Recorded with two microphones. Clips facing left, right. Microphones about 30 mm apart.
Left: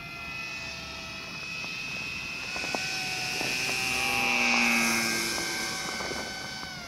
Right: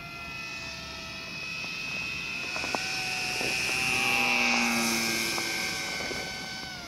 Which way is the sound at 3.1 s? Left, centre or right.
Right.